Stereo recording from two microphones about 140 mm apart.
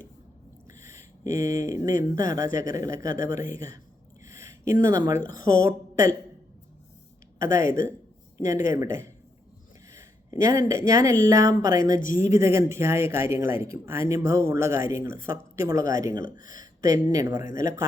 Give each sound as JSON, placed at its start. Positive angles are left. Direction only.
{"t": 0.8, "sound": "speech", "side_deg": -20}
{"t": 4.3, "sound": "a sound", "side_deg": -20}
{"t": 5.4, "sound": "a woman's voice", "side_deg": 75}
{"t": 5.6, "sound": "speech", "side_deg": -25}
{"t": 7.3, "sound": "speech", "side_deg": -20}